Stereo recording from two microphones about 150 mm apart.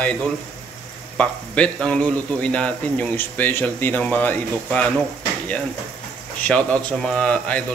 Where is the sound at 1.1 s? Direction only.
10° left (ahead or behind).